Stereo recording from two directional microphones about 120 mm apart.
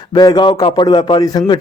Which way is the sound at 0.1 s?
40° left (ahead or behind).